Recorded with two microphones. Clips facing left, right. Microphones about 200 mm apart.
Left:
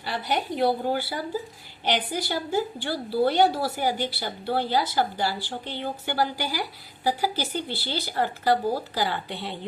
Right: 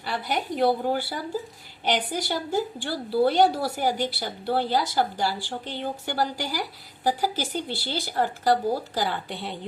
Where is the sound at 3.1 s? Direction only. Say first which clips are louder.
Right 1 dB; 45° right (ahead or behind).